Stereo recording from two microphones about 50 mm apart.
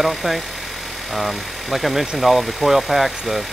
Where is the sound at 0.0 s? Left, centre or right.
Centre.